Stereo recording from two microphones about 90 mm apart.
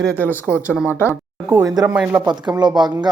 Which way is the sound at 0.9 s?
30° left (ahead or behind).